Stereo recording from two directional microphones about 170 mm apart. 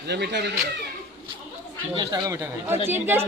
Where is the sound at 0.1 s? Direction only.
85° right.